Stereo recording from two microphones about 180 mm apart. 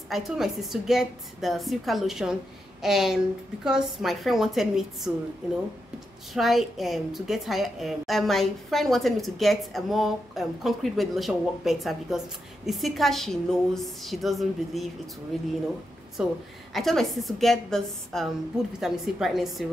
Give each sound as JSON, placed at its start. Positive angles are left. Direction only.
{"t": 0.1, "sound": "a woman's voice", "side_deg": 0}
{"t": 6.3, "sound": "a woman's voice", "side_deg": 0}
{"t": 16.2, "sound": "a woman's voice", "side_deg": -5}